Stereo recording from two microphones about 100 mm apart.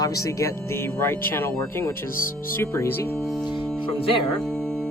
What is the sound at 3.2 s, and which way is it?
Speech, centre (ahead or behind).